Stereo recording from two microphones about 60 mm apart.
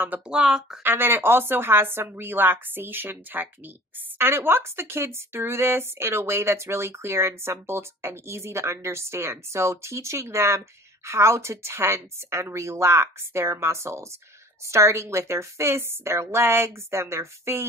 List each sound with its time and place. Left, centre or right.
0.3 s speech: centre
0.8 s a woman's voice: right